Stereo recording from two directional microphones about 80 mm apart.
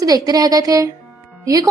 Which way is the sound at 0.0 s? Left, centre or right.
Right.